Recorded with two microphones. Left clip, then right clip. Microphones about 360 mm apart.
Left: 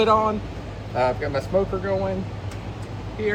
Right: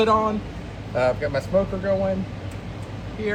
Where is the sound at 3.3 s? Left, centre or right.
Centre.